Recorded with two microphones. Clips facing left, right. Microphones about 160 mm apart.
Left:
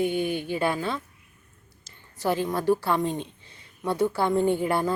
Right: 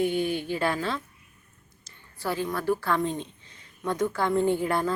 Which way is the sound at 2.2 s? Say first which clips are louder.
Left 4 dB; 20° left (ahead or behind).